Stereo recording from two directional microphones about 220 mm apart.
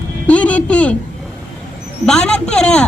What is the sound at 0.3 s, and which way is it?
Speech, 5° left (ahead or behind).